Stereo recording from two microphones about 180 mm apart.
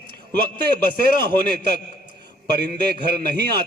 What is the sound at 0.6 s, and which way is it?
A man's voice, 60° right (ahead or behind).